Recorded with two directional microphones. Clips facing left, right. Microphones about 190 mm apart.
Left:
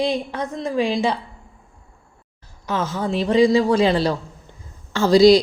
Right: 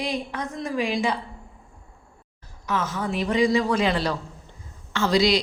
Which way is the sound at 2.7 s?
30° left (ahead or behind).